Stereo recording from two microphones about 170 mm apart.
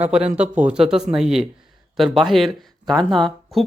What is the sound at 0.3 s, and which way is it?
Speech, 40° right (ahead or behind).